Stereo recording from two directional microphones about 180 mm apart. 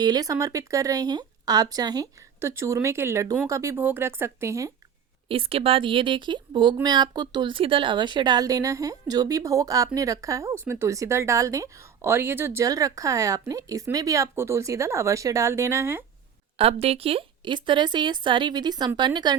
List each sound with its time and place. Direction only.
0.0 s a woman's voice: 20° right (ahead or behind)
5.3 s a woman's voice: 30° right (ahead or behind); by 16.0 s 15° right (ahead or behind)
16.6 s speech: 35° right (ahead or behind)